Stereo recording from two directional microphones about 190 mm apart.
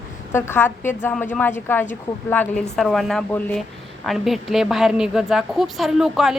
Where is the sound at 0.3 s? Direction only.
10° left (ahead or behind).